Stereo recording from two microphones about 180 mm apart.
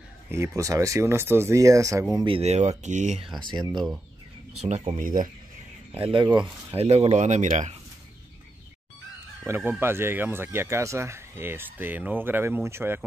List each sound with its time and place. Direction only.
0.6 s speech: 15° right (ahead or behind)
2.2 s speech: 35° right (ahead or behind)
3.3 s speech: 25° right (ahead or behind)
3.7 s speech: 5° right (ahead or behind)
4.6 s speech: 40° right (ahead or behind)
6.0 s speech: 25° right (ahead or behind); by 7.7 s 40° right (ahead or behind)
9.6 s speech: 10° right (ahead or behind)